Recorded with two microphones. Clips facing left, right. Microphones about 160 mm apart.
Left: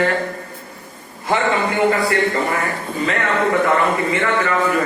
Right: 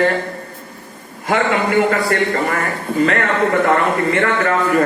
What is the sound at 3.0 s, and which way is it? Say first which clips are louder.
A man's voice: right 4 dB; 55° right (ahead or behind).